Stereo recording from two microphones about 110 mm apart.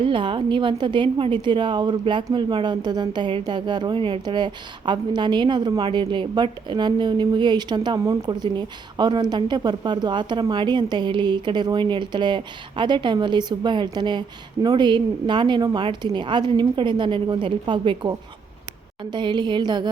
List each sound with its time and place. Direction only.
0.0 s a woman's voice: 50° right (ahead or behind)
19.1 s a woman's voice: 45° right (ahead or behind)